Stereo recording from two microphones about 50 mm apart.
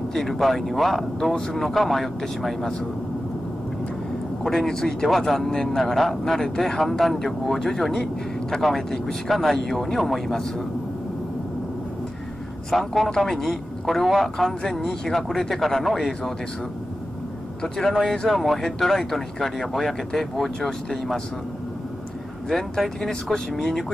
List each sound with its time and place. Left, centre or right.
0.1 s speech: centre
4.4 s speech: centre
12.7 s speech: centre
17.8 s speech: centre
22.5 s speech: centre